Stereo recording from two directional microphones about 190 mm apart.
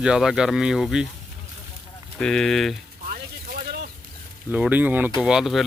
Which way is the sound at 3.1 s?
50° right (ahead or behind).